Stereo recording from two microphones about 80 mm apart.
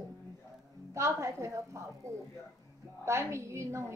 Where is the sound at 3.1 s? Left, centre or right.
Right.